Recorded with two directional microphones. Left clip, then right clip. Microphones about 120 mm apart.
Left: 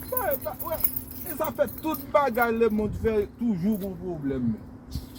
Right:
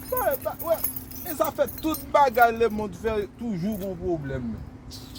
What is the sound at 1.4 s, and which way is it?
Speech, 75° right (ahead or behind).